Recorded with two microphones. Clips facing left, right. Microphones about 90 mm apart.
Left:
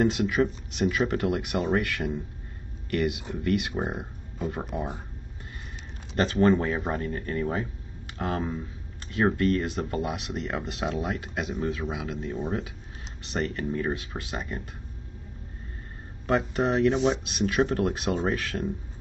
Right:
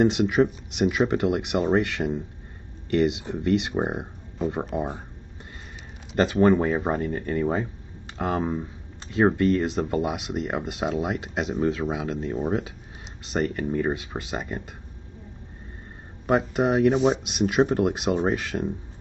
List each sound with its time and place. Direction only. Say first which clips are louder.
0.0 s speech: right 4 dB; 20° right (ahead or behind)
6.1 s speech: right 3 dB; 15° right (ahead or behind)
16.3 s speech: right 3 dB; 15° right (ahead or behind)
17.3 s speech: right 3 dB; 20° right (ahead or behind)